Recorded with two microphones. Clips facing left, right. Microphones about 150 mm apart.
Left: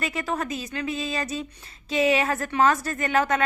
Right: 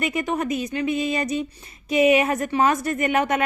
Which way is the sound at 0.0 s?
20° right (ahead or behind).